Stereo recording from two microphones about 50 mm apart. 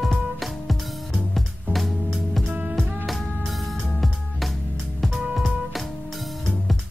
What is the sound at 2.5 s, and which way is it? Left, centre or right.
Music, right.